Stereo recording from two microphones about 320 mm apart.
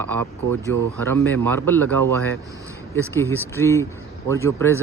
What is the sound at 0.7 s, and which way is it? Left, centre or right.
Speech, right.